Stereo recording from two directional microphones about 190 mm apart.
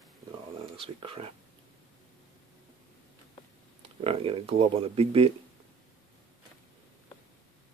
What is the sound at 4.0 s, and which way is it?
Speech, 30° right (ahead or behind).